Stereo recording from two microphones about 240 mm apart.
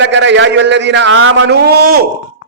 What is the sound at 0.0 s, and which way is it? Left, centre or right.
A man's voice, right.